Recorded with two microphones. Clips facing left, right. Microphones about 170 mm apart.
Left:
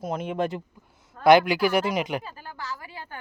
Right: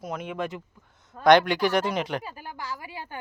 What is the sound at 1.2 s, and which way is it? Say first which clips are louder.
Speech: left 1 dB; 5° left (ahead or behind).